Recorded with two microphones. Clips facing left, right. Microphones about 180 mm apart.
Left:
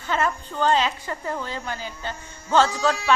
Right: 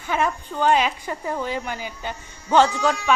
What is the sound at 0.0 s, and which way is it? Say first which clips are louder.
A woman's voice: right 1 dB; 15° right (ahead or behind).